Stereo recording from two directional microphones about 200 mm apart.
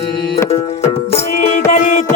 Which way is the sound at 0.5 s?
30° left (ahead or behind).